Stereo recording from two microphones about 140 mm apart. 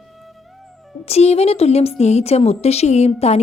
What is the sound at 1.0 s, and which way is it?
Speech, 50° left (ahead or behind).